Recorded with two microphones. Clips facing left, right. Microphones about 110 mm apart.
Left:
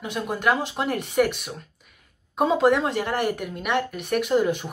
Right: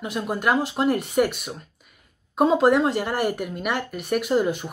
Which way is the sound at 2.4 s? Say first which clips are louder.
Right 2 dB; 35° right (ahead or behind).